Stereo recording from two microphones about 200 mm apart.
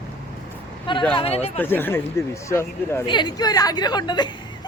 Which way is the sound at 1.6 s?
10° left (ahead or behind).